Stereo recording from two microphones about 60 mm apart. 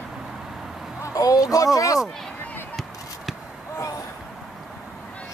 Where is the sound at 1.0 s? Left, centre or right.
Left.